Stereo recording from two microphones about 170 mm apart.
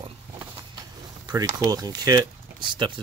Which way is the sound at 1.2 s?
20° right (ahead or behind).